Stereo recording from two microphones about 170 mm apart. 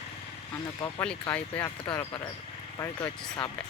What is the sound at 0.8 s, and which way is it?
Speech, 10° left (ahead or behind).